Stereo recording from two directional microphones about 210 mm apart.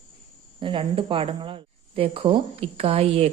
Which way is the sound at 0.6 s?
25° right (ahead or behind).